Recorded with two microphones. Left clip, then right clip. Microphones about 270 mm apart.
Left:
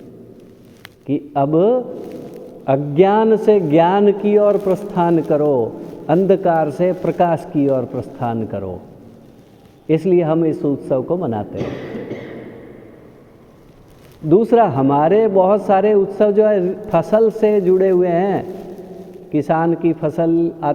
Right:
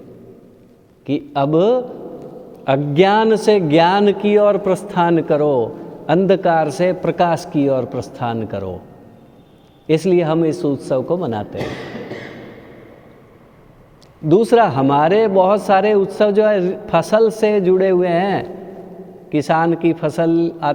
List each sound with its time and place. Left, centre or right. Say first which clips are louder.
1.0 s a man's voice: even; right
9.8 s a man's voice: even; right
14.3 s a man's voice: even; right